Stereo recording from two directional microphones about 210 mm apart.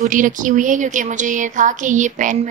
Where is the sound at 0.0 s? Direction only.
40° right (ahead or behind).